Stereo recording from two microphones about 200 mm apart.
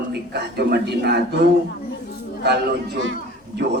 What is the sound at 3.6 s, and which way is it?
Speech, 55° right (ahead or behind).